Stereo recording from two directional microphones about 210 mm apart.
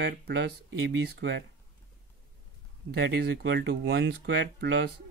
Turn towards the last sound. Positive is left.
turn(degrees=-55)  # may be behind; listen again after turning